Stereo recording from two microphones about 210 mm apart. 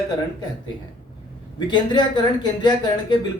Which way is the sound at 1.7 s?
20° left (ahead or behind).